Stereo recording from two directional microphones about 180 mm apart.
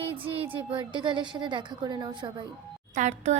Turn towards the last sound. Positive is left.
turn(degrees=-40)  # may be behind; listen again after turning